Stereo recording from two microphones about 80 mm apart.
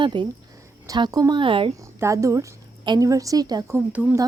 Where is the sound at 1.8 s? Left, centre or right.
Right.